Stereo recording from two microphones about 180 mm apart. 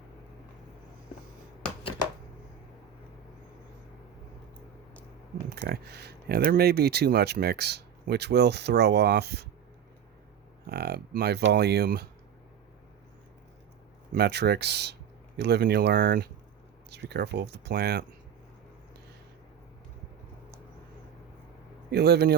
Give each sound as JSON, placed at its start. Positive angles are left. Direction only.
{"t": 5.5, "sound": "speech", "side_deg": -60}
{"t": 10.7, "sound": "speech", "side_deg": -65}
{"t": 14.1, "sound": "speech", "side_deg": -65}
{"t": 21.8, "sound": "speech", "side_deg": -65}